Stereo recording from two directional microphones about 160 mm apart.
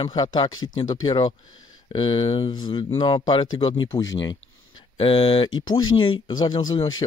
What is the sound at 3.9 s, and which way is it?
Speech, 20° left (ahead or behind).